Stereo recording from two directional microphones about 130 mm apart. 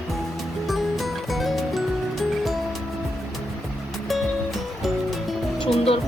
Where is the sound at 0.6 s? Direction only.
Centre (ahead or behind).